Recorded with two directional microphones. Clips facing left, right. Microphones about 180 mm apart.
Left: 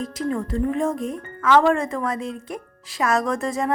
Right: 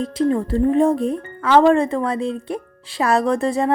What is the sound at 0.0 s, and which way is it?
A woman's voice, 30° right (ahead or behind).